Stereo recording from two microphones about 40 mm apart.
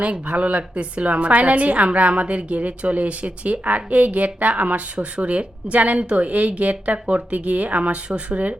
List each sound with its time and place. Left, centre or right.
0.0 s a woman's voice: right